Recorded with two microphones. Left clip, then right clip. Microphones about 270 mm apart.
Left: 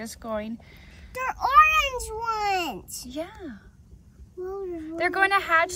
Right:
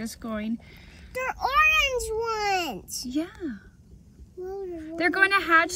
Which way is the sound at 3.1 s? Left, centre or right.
Left.